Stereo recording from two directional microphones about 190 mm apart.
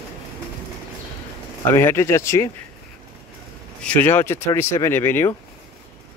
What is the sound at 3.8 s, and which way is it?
Speech, 10° left (ahead or behind).